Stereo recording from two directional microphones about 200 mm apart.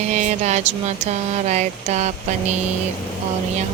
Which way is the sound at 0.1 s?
35° right (ahead or behind).